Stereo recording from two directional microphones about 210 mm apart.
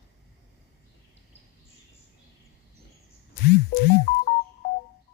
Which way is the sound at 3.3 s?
45° left (ahead or behind).